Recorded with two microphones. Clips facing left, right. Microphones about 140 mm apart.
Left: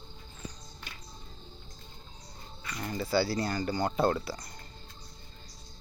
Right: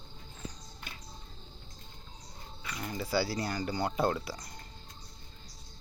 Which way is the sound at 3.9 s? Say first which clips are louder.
Left 3 dB; centre (ahead or behind).